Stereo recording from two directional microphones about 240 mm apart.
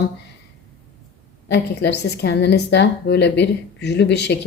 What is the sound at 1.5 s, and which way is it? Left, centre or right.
A woman's voice, left.